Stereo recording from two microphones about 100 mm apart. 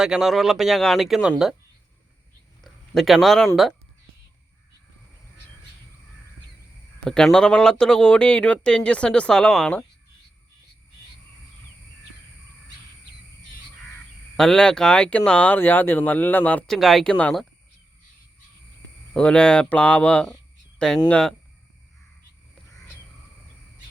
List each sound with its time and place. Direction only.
0.0 s speech: 5° right (ahead or behind)
2.6 s speech: centre (ahead or behind)
7.0 s speech: 5° left (ahead or behind)
14.3 s speech: 5° left (ahead or behind)
16.6 s speech: centre (ahead or behind)
19.1 s speech: 10° left (ahead or behind)